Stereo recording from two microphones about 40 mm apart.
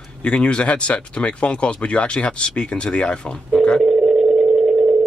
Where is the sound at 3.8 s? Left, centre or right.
Centre.